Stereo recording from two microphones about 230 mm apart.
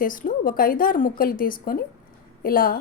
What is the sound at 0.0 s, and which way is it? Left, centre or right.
Speech, left.